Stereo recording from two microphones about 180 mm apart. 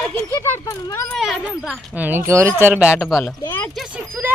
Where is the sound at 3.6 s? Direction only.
Centre (ahead or behind).